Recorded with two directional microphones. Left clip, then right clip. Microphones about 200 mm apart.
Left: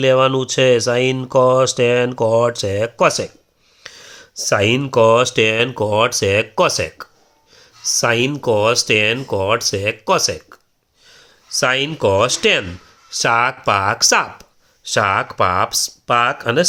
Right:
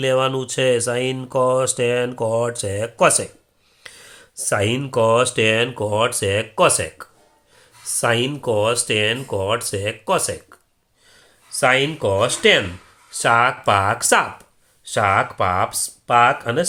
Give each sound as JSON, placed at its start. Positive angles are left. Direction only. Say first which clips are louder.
{"t": 0.0, "sound": "speech", "louder": "left 5 dB", "side_deg": 25}
{"t": 11.0, "sound": "a sound", "louder": "left 5 dB", "side_deg": 35}
{"t": 11.6, "sound": "speech", "louder": "left 1 dB", "side_deg": 40}